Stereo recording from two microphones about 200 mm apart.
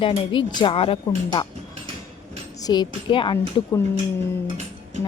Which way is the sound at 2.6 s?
25° left (ahead or behind).